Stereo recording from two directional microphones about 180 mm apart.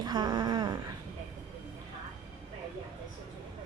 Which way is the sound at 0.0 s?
25° right (ahead or behind).